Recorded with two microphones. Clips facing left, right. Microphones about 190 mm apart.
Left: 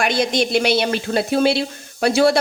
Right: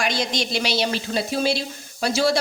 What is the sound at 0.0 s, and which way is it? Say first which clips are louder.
A woman's voice: left 6 dB; 55° left (ahead or behind).